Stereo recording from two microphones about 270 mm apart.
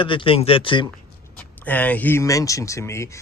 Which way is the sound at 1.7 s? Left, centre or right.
Centre.